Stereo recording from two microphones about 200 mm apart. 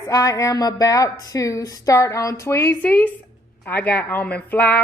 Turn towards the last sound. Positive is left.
turn(degrees=10)  # may be behind; listen again after turning